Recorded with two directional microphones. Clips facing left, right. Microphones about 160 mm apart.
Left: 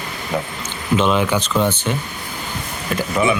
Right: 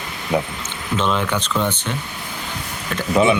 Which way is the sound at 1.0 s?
10° left (ahead or behind).